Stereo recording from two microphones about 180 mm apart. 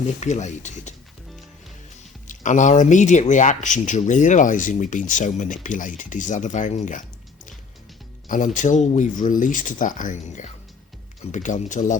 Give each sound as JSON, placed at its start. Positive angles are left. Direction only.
{"t": 0.2, "sound": "speech", "side_deg": 40}
{"t": 2.2, "sound": "speech", "side_deg": 45}
{"t": 8.3, "sound": "speech", "side_deg": 45}